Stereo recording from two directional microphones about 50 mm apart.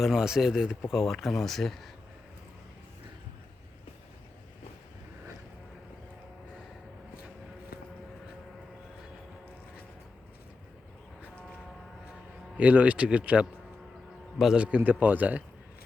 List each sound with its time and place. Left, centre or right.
0.0 s speech: centre
12.5 s a man's voice: right
14.5 s a man's voice: right